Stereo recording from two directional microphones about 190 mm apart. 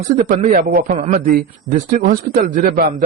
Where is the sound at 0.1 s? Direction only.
40° right (ahead or behind).